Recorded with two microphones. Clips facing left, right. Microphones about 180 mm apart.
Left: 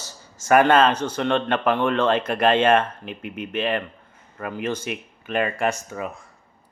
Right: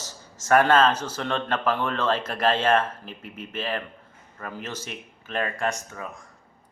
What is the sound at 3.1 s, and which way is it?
Speech, 65° left (ahead or behind).